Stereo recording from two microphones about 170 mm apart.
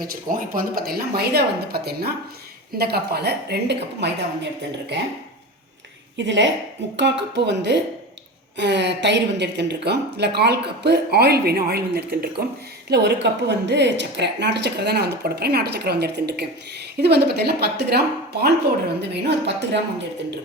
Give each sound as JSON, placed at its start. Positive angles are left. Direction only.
{"t": 0.0, "sound": "a woman's voice", "side_deg": -55}
{"t": 4.0, "sound": "a woman's voice", "side_deg": -85}
{"t": 6.1, "sound": "a woman's voice", "side_deg": -90}
{"t": 12.9, "sound": "a woman's voice", "side_deg": -85}
{"t": 19.1, "sound": "speech", "side_deg": -85}